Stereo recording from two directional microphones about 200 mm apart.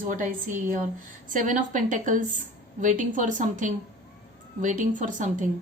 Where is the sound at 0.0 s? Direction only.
40° right (ahead or behind).